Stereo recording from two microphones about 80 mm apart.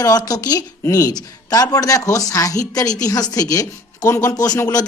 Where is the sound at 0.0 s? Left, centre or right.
Left.